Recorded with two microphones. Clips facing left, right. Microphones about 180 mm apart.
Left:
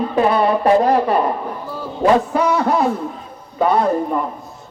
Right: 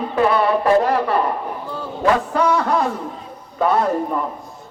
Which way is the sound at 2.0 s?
10° left (ahead or behind).